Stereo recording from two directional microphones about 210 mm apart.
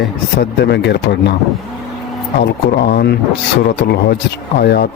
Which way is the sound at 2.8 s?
50° left (ahead or behind).